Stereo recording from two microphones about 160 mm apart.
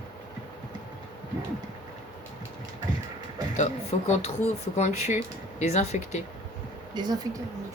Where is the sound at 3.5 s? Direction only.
45° left (ahead or behind).